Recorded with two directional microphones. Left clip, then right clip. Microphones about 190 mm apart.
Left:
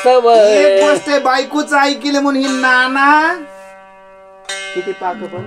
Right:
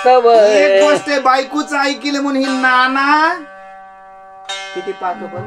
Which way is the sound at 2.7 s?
20° left (ahead or behind).